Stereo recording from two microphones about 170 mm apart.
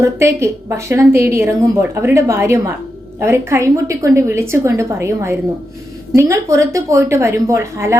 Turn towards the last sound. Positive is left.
turn(degrees=-15)  # may be behind; listen again after turning